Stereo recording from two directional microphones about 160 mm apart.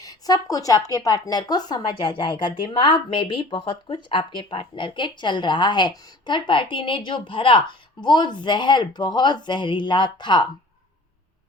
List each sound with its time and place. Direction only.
0.0 s a woman's voice: 25° left (ahead or behind)